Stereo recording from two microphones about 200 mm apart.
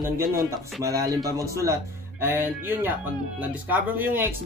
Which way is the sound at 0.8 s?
15° right (ahead or behind).